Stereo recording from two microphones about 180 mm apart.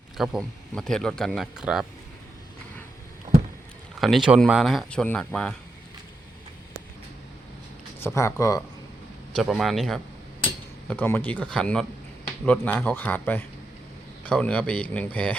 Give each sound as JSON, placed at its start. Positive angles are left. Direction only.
{"t": 0.2, "sound": "speech", "side_deg": 0}
{"t": 4.0, "sound": "speech", "side_deg": 0}
{"t": 8.0, "sound": "speech", "side_deg": 15}
{"t": 9.3, "sound": "speech", "side_deg": 0}